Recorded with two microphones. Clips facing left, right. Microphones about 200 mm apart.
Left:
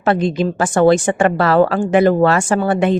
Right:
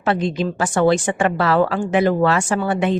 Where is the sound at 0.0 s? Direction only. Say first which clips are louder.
Left 4 dB; 50° left (ahead or behind).